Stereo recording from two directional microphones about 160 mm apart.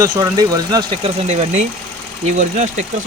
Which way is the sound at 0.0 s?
25° right (ahead or behind).